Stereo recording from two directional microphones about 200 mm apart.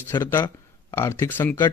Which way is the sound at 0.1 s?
10° left (ahead or behind).